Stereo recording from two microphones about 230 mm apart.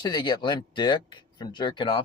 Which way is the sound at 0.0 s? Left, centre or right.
Centre.